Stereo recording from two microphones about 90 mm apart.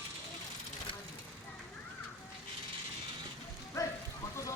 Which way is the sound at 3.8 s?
35° left (ahead or behind).